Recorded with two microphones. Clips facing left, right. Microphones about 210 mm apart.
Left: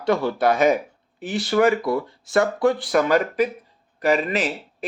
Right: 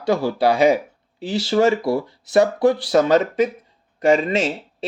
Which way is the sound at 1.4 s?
25° right (ahead or behind).